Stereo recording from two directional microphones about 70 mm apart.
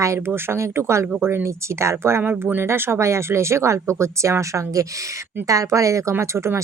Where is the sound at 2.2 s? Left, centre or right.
Right.